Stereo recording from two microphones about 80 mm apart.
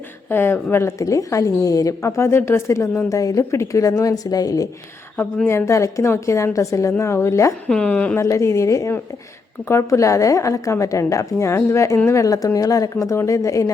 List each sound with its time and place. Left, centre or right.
0.3 s a woman's voice: left
5.5 s a woman's voice: left
7.7 s a woman's voice: centre
8.1 s a woman's voice: left